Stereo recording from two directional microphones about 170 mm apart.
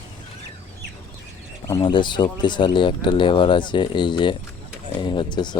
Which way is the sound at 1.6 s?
25° left (ahead or behind).